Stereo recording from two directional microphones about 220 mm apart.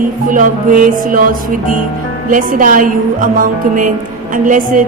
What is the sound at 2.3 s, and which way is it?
A woman's voice, 35° right (ahead or behind).